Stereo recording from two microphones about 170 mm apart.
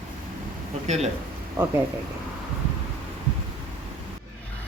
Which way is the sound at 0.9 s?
40° right (ahead or behind).